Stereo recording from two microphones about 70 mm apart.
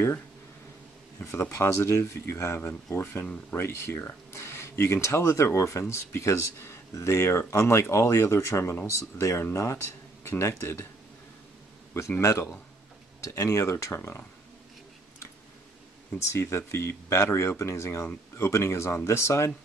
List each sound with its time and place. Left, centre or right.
1.2 s speech: left
12.2 s speech: left
16.2 s speech: left